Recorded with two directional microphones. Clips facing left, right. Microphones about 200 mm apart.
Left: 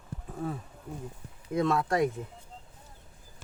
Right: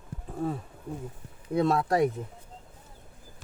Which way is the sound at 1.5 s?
35° right (ahead or behind).